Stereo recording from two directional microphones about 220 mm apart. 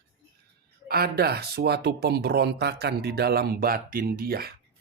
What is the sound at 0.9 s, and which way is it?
Speech, 45° right (ahead or behind).